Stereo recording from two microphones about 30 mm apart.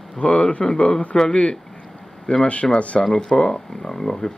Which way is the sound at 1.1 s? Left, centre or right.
Centre.